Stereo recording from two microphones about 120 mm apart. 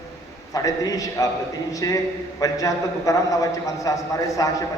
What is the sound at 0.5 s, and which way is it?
A man's voice, 30° left (ahead or behind).